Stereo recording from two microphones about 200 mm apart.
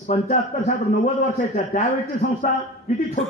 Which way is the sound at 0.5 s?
40° left (ahead or behind).